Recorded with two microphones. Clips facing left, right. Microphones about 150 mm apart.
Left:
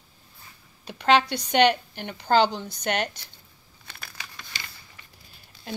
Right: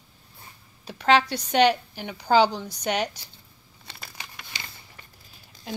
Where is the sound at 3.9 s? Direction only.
20° right (ahead or behind).